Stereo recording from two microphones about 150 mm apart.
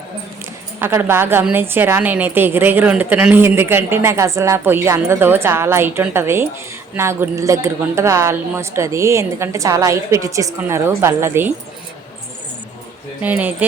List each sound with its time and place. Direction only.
0.8 s a woman's voice: 15° right (ahead or behind)
13.2 s a woman's voice: 10° right (ahead or behind)